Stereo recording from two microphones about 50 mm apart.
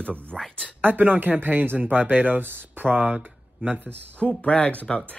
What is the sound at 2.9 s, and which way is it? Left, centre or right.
Speech, right.